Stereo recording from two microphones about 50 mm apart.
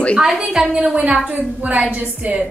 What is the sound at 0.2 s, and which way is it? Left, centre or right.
Speech, centre.